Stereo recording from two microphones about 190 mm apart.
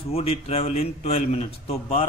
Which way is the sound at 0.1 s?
30° left (ahead or behind).